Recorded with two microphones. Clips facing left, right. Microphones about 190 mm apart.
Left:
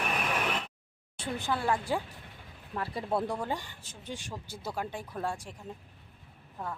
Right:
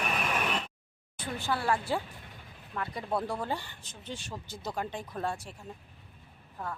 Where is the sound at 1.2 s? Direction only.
20° left (ahead or behind).